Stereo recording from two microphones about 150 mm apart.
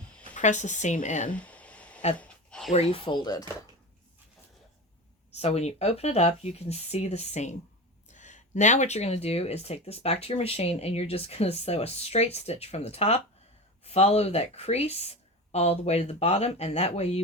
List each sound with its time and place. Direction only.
0.3 s speech: 55° left (ahead or behind)
1.3 s a sound: 10° left (ahead or behind)
2.7 s speech: 40° left (ahead or behind)
5.3 s speech: 45° left (ahead or behind)